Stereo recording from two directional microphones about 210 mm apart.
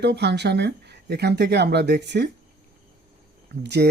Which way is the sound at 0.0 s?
55° right (ahead or behind).